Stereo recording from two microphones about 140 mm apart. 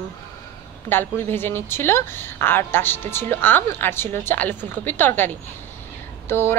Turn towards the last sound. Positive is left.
turn(degrees=15)  # may be behind; listen again after turning